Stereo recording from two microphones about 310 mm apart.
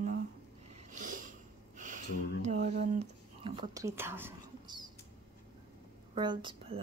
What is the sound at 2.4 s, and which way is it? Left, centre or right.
Speech, right.